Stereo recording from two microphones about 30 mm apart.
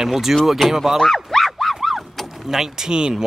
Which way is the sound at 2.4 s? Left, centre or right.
Centre.